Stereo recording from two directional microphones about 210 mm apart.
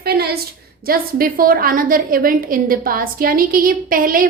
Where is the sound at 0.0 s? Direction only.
50° right (ahead or behind).